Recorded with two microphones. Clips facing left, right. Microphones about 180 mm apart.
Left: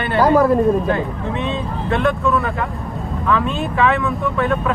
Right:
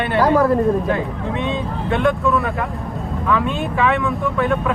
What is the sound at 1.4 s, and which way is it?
Speech, 15° right (ahead or behind).